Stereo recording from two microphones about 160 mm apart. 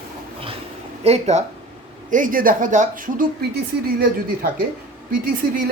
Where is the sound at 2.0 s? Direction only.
55° right (ahead or behind).